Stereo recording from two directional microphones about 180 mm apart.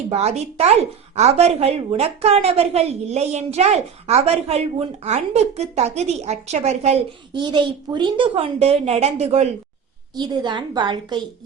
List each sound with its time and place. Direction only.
0.1 s a woman's voice: 35° right (ahead or behind)
7.3 s a woman's voice: 25° right (ahead or behind)
10.2 s a woman's voice: 25° right (ahead or behind)